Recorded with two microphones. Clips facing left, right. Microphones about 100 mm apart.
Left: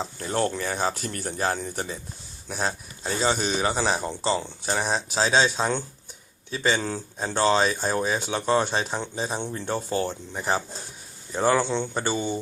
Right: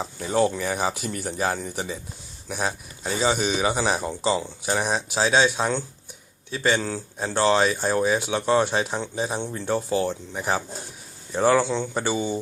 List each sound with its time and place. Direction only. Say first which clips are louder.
0.0 s speech: right 4 dB; 5° right (ahead or behind)